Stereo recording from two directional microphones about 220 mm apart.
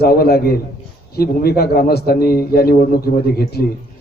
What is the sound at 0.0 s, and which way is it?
A man's voice, 45° left (ahead or behind).